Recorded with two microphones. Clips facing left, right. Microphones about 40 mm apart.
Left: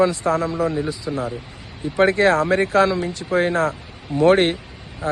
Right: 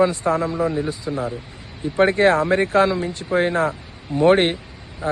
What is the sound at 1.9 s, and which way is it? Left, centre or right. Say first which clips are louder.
Speech: even; centre.